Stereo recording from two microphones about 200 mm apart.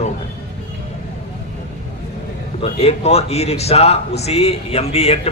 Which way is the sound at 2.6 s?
30° left (ahead or behind).